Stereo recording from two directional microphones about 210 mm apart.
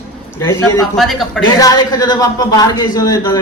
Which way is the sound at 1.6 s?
15° left (ahead or behind).